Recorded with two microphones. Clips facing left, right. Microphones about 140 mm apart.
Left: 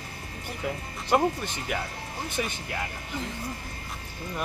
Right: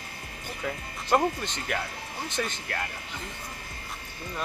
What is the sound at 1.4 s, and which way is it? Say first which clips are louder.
Speech: even; 10° left (ahead or behind).